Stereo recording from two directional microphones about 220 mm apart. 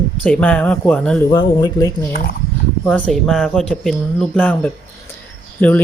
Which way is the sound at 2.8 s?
5° left (ahead or behind).